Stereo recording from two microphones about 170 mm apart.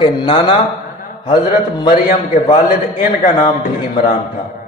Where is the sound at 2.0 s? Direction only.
50° left (ahead or behind).